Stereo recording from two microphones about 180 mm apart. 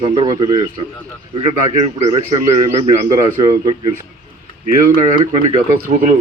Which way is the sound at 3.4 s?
25° right (ahead or behind).